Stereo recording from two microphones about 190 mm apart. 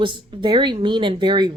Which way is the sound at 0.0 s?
25° right (ahead or behind).